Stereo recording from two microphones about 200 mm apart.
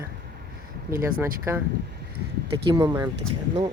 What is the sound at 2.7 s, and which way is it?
Speech, 20° right (ahead or behind).